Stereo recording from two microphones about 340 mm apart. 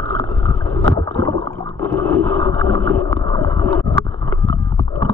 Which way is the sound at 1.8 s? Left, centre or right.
Centre.